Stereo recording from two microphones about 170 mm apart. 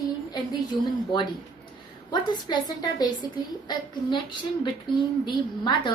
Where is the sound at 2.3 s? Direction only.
25° left (ahead or behind).